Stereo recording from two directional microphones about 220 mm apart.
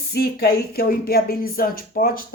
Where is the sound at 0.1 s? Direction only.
45° left (ahead or behind).